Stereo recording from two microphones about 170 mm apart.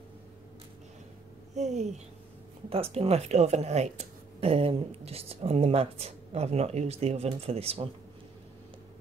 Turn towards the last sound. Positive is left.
turn(degrees=-35)  # may be behind; listen again after turning